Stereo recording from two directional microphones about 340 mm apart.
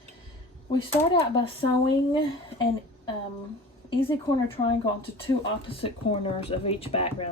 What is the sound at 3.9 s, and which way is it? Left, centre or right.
Speech, centre.